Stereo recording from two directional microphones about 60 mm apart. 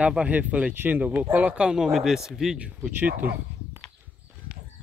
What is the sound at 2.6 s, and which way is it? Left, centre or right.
Speech, right.